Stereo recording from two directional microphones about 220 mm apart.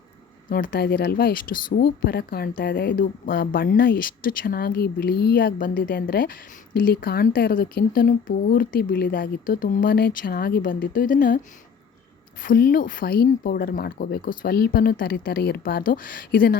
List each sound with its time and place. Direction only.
0.5 s speech: 40° left (ahead or behind)
12.4 s speech: 40° left (ahead or behind)